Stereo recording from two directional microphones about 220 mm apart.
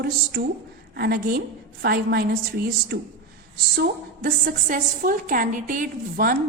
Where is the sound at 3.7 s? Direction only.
40° right (ahead or behind).